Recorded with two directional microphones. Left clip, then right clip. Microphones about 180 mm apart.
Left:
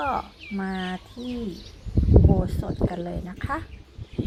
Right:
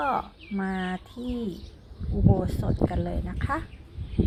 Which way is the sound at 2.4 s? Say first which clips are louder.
Even; centre (ahead or behind).